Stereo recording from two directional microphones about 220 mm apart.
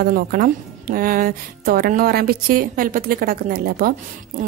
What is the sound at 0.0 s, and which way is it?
Speech, 40° right (ahead or behind).